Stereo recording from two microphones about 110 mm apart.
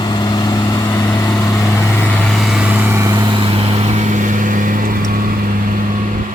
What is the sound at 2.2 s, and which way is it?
Vehicle, centre (ahead or behind).